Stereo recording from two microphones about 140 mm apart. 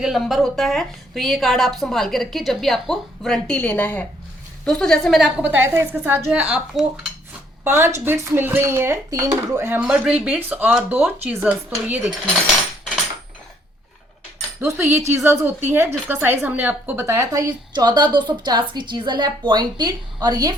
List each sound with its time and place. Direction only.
0.0 s a woman's voice: centre (ahead or behind)
5.4 s speech: 15° right (ahead or behind)
7.6 s speech: 15° right (ahead or behind)
14.6 s a woman's voice: 20° right (ahead or behind)